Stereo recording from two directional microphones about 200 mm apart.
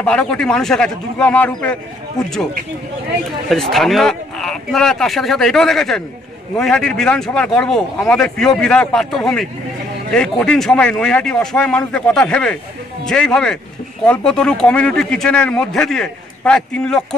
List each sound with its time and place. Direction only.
0.0 s speech: 5° left (ahead or behind)
3.4 s speech: centre (ahead or behind)